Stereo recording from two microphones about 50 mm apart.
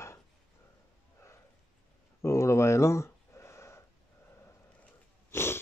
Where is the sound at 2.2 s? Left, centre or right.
Left.